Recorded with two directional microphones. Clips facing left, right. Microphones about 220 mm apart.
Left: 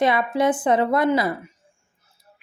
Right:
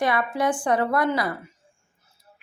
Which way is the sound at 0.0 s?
20° left (ahead or behind).